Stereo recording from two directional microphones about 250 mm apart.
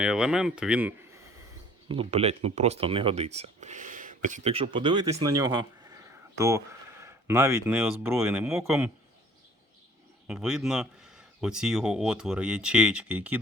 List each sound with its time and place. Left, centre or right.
0.0 s speech: centre
1.9 s speech: right
5.4 s a sound: centre
7.0 s speech: centre
10.2 s speech: centre